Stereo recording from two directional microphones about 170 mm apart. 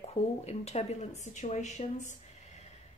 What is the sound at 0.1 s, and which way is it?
Speech, 40° left (ahead or behind).